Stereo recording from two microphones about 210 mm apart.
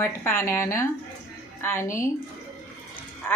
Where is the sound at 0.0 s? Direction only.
10° left (ahead or behind).